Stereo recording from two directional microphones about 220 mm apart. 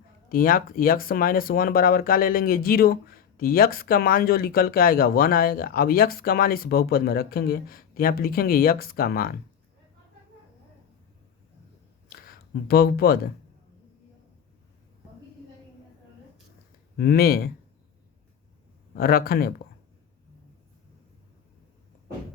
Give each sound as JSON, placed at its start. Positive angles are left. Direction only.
{"t": 0.3, "sound": "speech", "side_deg": 40}
{"t": 12.1, "sound": "speech", "side_deg": 45}
{"t": 17.0, "sound": "speech", "side_deg": 45}
{"t": 18.9, "sound": "speech", "side_deg": 45}